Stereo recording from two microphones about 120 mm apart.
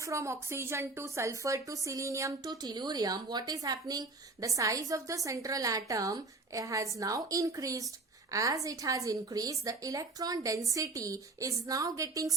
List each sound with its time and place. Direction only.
0.0 s a woman's voice: 25° right (ahead or behind)